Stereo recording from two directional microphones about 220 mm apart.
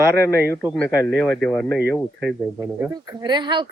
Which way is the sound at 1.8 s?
45° right (ahead or behind).